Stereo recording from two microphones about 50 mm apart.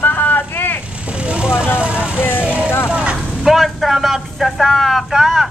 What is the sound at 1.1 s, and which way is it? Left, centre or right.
Vehicle, right.